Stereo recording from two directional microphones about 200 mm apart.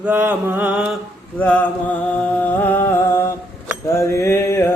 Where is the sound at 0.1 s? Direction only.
10° right (ahead or behind).